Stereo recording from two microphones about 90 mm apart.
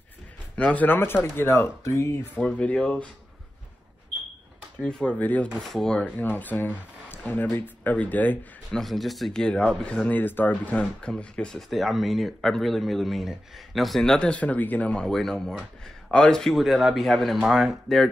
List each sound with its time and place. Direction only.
0.6 s speech: 15° left (ahead or behind); by 2.1 s 35° left (ahead or behind)
2.3 s speech: 15° left (ahead or behind)
4.7 s speech: 10° left (ahead or behind)
5.6 s speech: 5° left (ahead or behind)
8.7 s speech: centre (ahead or behind)
11.7 s speech: centre (ahead or behind)